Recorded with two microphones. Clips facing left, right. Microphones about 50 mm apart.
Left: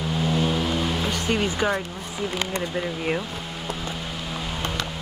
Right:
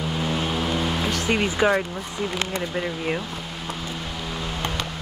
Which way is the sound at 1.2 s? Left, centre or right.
Right.